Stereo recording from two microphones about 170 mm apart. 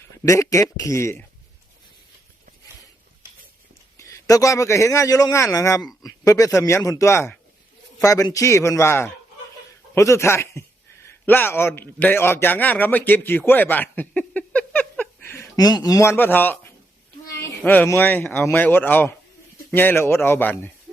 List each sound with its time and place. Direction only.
0.3 s speech: 20° left (ahead or behind)
3.9 s a man's voice: 15° left (ahead or behind)